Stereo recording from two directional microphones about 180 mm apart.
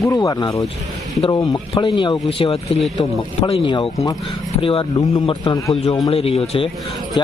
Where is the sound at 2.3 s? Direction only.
30° left (ahead or behind).